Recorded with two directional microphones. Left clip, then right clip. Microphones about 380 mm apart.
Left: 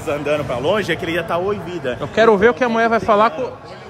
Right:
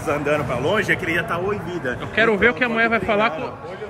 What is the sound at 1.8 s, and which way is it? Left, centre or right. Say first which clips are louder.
Speech: left 5 dB; centre.